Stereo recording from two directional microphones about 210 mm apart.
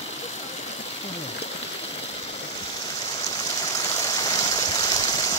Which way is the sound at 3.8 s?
15° left (ahead or behind).